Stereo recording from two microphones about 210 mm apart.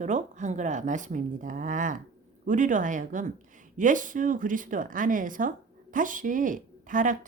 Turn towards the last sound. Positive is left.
turn(degrees=-40)  # may be behind; listen again after turning